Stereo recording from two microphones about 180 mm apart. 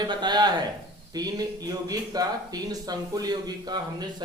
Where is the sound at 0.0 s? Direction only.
25° right (ahead or behind).